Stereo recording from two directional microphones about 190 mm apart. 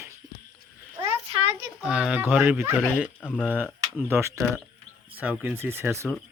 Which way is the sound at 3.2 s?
5° left (ahead or behind).